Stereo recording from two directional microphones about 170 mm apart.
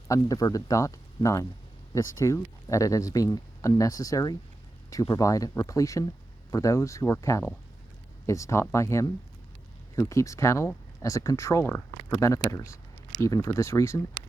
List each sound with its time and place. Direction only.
0.1 s speech: 20° left (ahead or behind)